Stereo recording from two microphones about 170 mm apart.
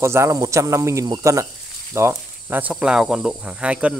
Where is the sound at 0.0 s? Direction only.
15° right (ahead or behind).